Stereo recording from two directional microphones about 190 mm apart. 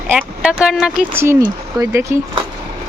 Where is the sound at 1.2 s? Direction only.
15° right (ahead or behind).